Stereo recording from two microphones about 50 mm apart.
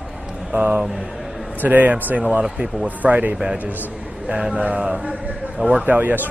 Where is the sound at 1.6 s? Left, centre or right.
Right.